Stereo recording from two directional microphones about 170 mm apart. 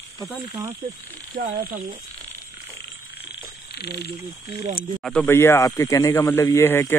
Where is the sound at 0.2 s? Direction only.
5° right (ahead or behind).